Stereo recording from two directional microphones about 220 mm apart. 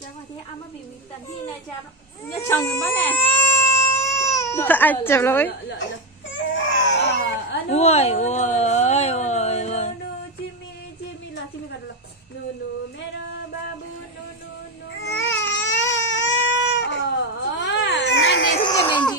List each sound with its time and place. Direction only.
2.4 s baby cry: 10° left (ahead or behind)
4.9 s a woman's voice: 10° left (ahead or behind)
6.3 s baby cry: 55° left (ahead or behind)
7.7 s a sound: 30° left (ahead or behind)
14.9 s baby cry: 55° left (ahead or behind)
18.6 s a sound: 20° left (ahead or behind)